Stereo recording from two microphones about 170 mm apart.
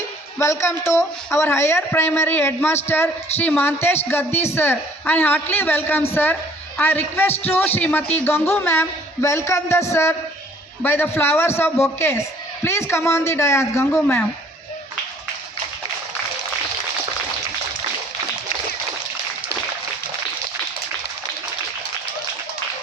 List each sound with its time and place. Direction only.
0.3 s a woman's voice: 15° left (ahead or behind)